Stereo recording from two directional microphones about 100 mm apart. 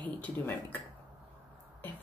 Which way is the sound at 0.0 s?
15° left (ahead or behind).